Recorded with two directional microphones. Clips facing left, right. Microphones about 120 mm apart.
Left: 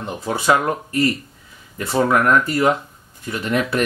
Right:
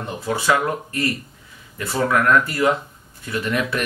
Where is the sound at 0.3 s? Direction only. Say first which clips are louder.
Left 2 dB; 30° left (ahead or behind).